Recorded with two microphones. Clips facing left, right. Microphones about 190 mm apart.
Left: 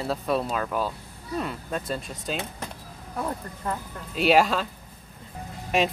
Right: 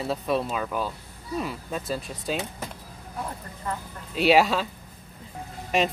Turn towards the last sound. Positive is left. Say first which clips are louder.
# even
turn(degrees=0)  # may be behind; listen again after turning